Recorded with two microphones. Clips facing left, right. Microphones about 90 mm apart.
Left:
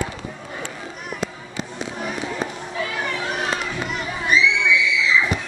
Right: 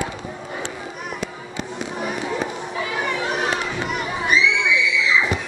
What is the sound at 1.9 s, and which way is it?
Children playing, 15° right (ahead or behind).